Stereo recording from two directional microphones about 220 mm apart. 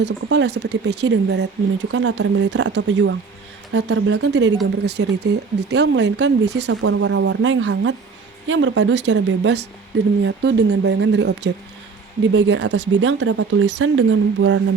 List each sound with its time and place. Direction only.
0.0 s speech: 50° right (ahead or behind)